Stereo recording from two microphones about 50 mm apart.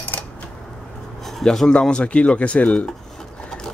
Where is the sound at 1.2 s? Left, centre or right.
Centre.